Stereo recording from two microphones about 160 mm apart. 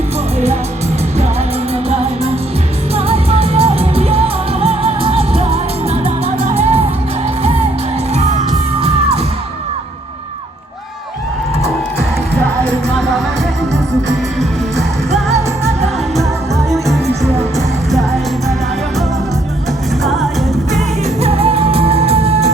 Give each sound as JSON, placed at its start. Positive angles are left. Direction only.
{"t": 3.1, "sound": "music", "side_deg": -40}
{"t": 21.2, "sound": "music", "side_deg": -40}